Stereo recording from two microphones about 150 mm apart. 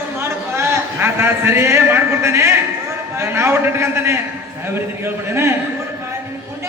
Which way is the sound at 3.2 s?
15° right (ahead or behind).